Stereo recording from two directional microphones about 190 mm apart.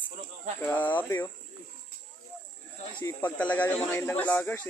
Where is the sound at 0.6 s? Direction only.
10° left (ahead or behind).